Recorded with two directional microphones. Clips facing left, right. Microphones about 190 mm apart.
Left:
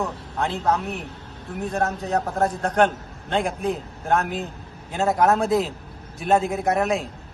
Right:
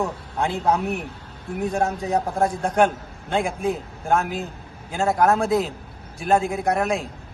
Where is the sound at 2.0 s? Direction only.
15° right (ahead or behind).